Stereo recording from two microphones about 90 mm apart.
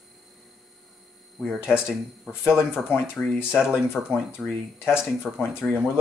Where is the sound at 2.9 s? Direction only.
25° left (ahead or behind).